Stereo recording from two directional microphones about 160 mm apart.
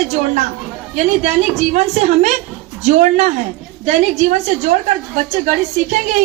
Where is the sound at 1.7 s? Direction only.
45° right (ahead or behind).